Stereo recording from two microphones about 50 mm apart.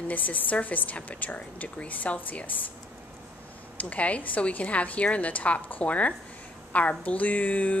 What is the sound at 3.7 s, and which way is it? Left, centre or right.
A woman's voice, left.